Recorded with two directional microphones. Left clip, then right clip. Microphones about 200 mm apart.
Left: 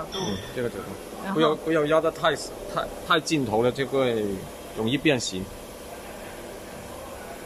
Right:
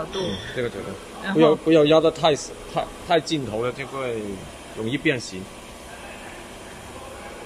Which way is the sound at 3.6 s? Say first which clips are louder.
Left 4 dB; 20° left (ahead or behind).